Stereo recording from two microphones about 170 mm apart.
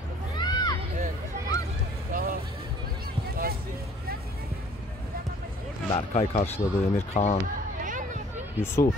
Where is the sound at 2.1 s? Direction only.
55° right (ahead or behind).